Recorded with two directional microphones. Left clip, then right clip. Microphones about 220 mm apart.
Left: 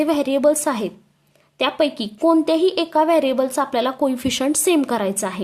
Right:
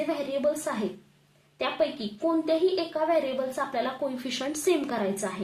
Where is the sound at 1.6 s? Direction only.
40° left (ahead or behind).